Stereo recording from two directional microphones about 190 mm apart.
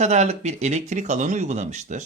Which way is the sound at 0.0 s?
35° right (ahead or behind).